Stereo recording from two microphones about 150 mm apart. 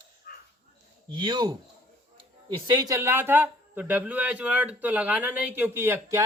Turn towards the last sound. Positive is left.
turn(degrees=-15)  # may be behind; listen again after turning